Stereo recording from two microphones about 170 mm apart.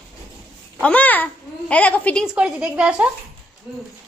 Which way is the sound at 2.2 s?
5° right (ahead or behind).